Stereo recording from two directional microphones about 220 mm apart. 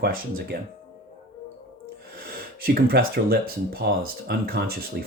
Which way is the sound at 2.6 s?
45° right (ahead or behind).